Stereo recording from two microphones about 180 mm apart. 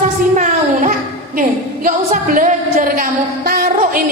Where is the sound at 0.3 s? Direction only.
45° right (ahead or behind).